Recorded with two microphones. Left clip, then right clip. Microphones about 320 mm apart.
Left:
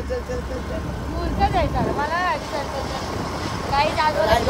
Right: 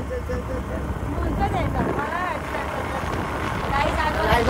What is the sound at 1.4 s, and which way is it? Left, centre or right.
Speech, centre.